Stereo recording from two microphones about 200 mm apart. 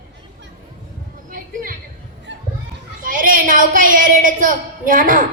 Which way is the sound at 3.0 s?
45° right (ahead or behind).